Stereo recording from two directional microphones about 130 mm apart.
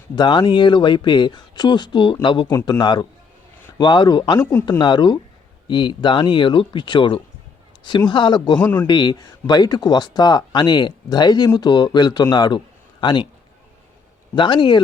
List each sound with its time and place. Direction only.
0.2 s speech: 35° left (ahead or behind)
8.5 s a man's voice: 10° left (ahead or behind)
8.9 s speech: 30° left (ahead or behind)
14.3 s speech: 35° left (ahead or behind)